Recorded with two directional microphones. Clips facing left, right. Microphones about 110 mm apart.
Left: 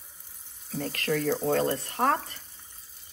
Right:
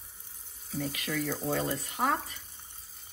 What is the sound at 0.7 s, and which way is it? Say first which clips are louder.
Speech: left 4 dB; 5° right (ahead or behind).